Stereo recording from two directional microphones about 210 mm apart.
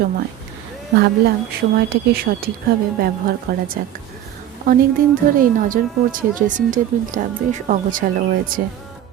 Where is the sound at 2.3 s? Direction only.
45° right (ahead or behind).